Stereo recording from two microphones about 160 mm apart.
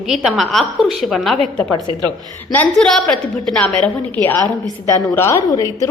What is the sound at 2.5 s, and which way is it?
A woman's voice, 5° left (ahead or behind).